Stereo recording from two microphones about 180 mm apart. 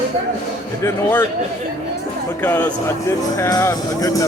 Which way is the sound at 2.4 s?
10° left (ahead or behind).